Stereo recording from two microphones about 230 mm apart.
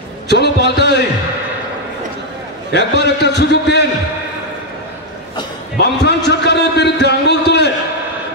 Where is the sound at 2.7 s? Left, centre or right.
Left.